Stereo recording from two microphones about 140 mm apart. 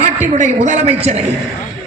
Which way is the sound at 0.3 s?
60° right (ahead or behind).